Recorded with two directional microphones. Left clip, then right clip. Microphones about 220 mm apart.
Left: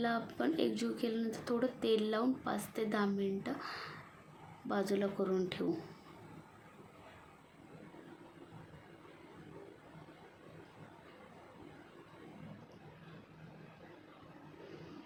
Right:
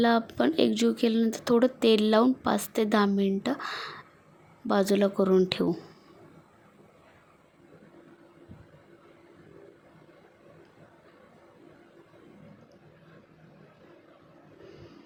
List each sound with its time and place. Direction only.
0.0 s speech: 45° right (ahead or behind)